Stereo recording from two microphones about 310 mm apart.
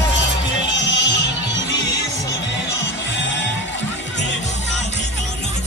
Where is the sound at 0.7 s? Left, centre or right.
Left.